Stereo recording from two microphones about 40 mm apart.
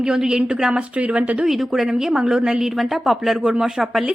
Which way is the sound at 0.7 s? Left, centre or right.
Right.